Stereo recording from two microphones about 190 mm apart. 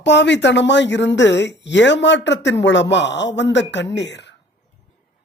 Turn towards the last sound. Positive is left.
turn(degrees=65)  # may be behind; listen again after turning